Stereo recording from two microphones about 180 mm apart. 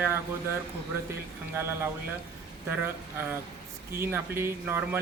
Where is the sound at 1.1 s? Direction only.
15° right (ahead or behind).